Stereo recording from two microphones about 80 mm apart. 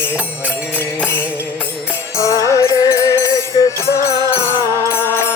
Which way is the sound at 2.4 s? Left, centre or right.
Left.